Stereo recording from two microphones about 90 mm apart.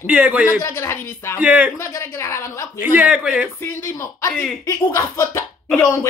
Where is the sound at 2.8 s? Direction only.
20° right (ahead or behind).